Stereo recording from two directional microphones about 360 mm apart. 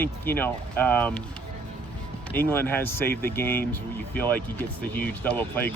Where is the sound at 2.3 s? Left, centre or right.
Centre.